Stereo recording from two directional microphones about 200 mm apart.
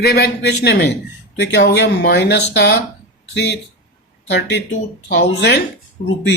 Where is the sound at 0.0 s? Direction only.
55° left (ahead or behind).